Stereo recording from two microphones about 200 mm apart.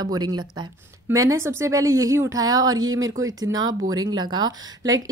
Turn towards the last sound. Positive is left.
turn(degrees=-20)  # may be behind; listen again after turning